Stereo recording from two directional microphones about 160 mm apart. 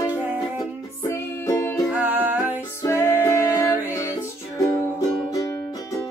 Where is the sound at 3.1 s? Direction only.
15° left (ahead or behind).